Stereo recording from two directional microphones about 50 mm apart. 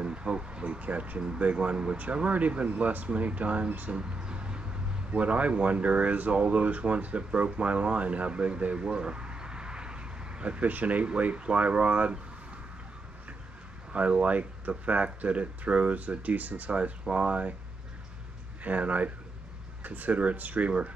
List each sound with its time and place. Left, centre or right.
0.0 s a sound: centre
0.7 s speech: right
3.9 s a sound: centre
5.1 s speech: right
13.9 s speech: right
18.6 s speech: right